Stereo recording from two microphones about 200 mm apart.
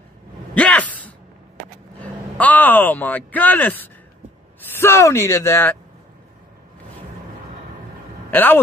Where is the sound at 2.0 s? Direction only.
10° left (ahead or behind).